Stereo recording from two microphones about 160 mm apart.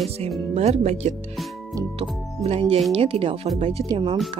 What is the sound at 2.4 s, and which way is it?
Speech, 40° right (ahead or behind).